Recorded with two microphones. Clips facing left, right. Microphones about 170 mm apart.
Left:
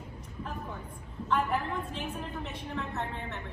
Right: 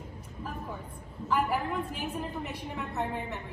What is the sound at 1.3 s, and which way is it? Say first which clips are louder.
A woman's voice: right 1 dB; 10° right (ahead or behind).